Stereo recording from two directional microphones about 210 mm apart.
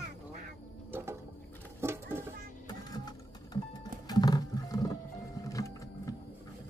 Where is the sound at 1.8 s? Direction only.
10° right (ahead or behind).